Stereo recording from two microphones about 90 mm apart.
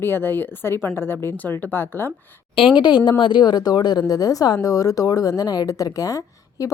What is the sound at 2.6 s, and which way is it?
A woman's voice, 65° left (ahead or behind).